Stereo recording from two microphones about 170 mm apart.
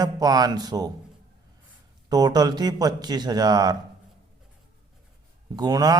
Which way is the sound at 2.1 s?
25° right (ahead or behind).